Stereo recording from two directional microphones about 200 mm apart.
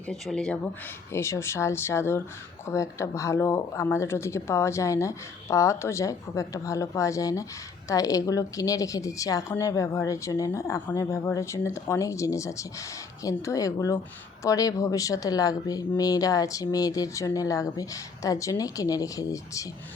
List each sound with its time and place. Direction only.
0.1 s a woman's voice: 5° left (ahead or behind)